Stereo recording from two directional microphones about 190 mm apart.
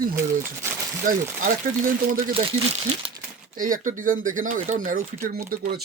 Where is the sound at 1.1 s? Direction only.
45° right (ahead or behind).